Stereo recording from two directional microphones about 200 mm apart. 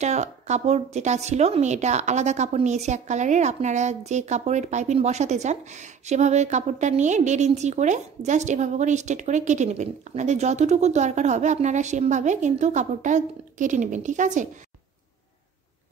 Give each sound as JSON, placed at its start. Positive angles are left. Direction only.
{"t": 0.0, "sound": "a woman's voice", "side_deg": -35}